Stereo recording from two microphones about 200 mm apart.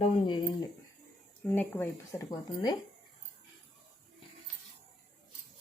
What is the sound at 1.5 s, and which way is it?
Speech, 10° left (ahead or behind).